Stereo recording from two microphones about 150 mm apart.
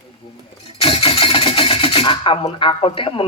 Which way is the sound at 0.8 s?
35° left (ahead or behind).